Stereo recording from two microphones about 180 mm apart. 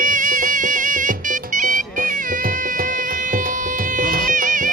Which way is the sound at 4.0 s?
50° right (ahead or behind).